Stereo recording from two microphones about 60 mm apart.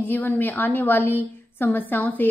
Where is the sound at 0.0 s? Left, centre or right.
Left.